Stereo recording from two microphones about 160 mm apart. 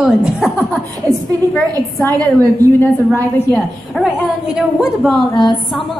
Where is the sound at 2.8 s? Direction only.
10° left (ahead or behind).